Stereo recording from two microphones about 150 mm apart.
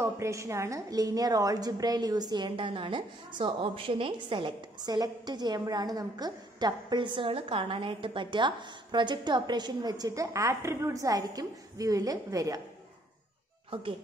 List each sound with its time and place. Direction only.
0.0 s a woman's voice: 20° right (ahead or behind)